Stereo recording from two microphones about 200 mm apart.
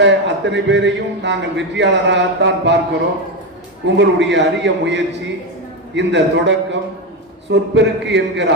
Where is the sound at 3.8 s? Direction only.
65° right (ahead or behind).